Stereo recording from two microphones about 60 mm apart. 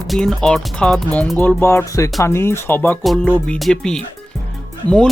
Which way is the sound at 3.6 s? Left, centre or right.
Centre.